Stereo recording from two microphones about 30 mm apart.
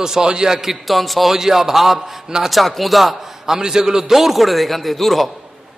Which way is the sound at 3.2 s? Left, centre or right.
Centre.